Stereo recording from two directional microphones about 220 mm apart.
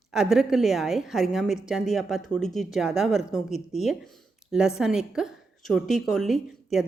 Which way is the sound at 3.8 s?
Centre (ahead or behind).